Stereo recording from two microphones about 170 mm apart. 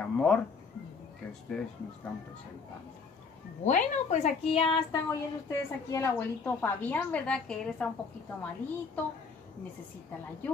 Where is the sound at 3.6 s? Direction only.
45° left (ahead or behind).